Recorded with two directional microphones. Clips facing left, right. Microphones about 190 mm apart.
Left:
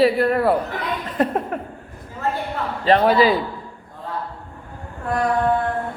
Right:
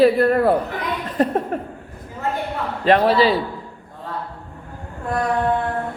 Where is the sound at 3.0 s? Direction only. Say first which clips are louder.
Even; 30° right (ahead or behind).